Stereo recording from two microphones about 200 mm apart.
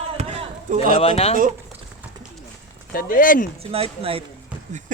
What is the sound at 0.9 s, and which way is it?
Speech, 30° left (ahead or behind).